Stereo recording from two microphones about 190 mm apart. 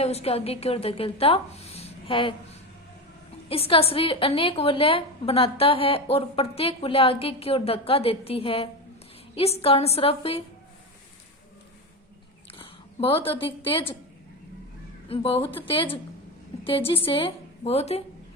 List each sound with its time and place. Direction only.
0.0 s a woman's voice: 35° left (ahead or behind)
3.5 s a woman's voice: 30° left (ahead or behind)
12.5 s speech: 30° left (ahead or behind)
15.1 s a woman's voice: 30° left (ahead or behind)